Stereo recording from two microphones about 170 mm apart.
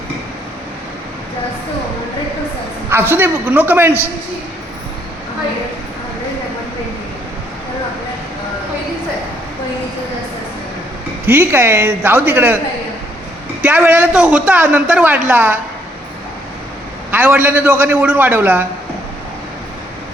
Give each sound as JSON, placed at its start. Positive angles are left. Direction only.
{"t": 2.9, "sound": "a man's voice", "side_deg": -15}
{"t": 11.3, "sound": "a man's voice", "side_deg": -15}
{"t": 13.6, "sound": "a man's voice", "side_deg": -10}
{"t": 17.1, "sound": "a man's voice", "side_deg": -10}